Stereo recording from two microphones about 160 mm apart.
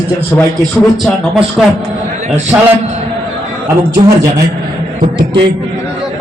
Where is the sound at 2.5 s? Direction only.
20° right (ahead or behind).